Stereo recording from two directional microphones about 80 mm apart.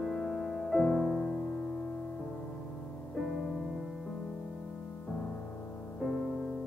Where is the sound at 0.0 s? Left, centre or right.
Centre.